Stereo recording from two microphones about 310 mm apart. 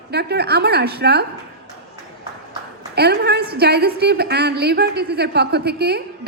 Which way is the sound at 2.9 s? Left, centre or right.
Right.